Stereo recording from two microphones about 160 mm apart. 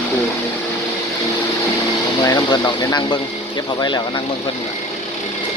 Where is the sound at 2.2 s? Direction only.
25° left (ahead or behind).